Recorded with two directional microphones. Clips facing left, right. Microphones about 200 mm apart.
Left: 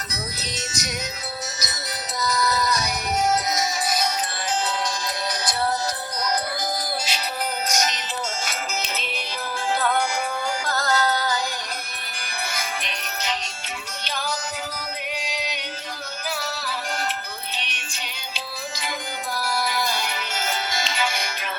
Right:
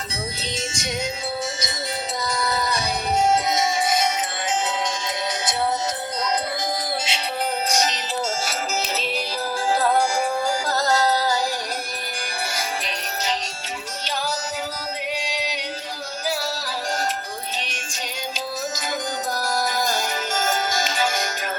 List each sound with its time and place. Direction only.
0.5 s music: 25° right (ahead or behind)
2.2 s music: 30° right (ahead or behind)
7.1 s music: 25° right (ahead or behind)
12.5 s music: 35° right (ahead or behind)
15.2 s music: 35° right (ahead or behind)
19.4 s music: 45° right (ahead or behind)